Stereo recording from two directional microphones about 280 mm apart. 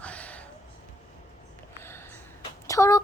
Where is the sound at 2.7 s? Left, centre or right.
Centre.